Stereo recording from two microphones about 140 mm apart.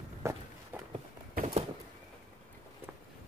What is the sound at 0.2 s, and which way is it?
Walk, 20° right (ahead or behind).